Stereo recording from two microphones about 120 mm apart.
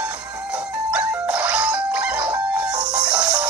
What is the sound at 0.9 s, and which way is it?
Music, 10° right (ahead or behind).